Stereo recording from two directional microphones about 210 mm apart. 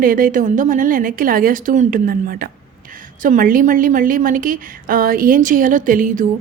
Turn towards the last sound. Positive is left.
turn(degrees=-40)  # may be behind; listen again after turning